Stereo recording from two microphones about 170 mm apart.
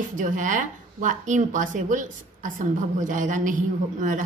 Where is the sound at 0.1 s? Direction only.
50° right (ahead or behind).